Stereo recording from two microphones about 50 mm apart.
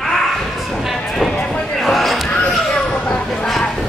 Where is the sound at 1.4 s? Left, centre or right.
Centre.